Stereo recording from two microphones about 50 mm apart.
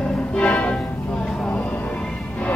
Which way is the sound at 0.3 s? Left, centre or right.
Left.